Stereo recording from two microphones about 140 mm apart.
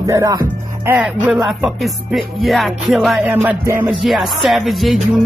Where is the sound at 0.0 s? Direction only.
25° right (ahead or behind).